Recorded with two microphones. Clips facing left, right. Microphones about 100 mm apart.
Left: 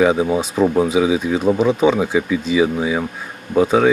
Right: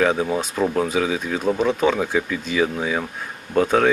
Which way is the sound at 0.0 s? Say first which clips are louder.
Left 4 dB; 10° left (ahead or behind).